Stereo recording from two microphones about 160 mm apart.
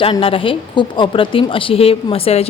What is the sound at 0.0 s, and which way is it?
A woman's voice, 35° left (ahead or behind).